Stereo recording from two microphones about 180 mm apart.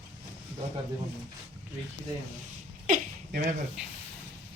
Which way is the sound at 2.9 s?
50° right (ahead or behind).